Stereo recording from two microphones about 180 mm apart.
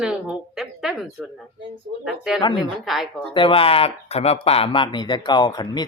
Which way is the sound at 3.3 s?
30° left (ahead or behind).